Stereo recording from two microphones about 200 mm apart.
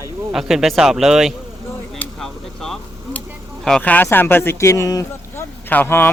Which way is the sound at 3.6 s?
5° left (ahead or behind).